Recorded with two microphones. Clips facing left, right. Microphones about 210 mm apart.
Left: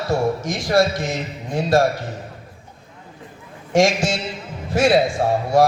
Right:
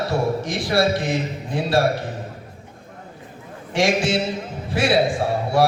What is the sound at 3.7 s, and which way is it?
A man's voice, 45° left (ahead or behind).